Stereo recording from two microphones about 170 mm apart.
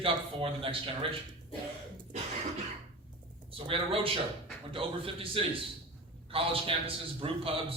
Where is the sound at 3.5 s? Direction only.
35° right (ahead or behind).